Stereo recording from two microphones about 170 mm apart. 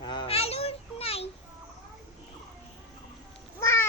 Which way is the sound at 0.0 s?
25° left (ahead or behind).